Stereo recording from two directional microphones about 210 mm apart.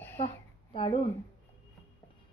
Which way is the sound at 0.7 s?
25° left (ahead or behind).